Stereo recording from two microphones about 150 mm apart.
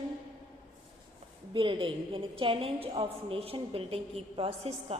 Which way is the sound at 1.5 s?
35° right (ahead or behind).